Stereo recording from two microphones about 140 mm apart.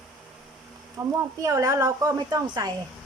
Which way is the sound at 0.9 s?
20° right (ahead or behind).